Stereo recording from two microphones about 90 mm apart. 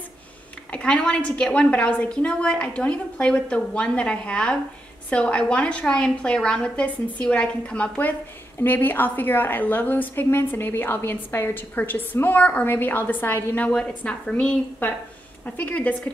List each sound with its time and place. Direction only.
0.7 s a woman's voice: 15° left (ahead or behind)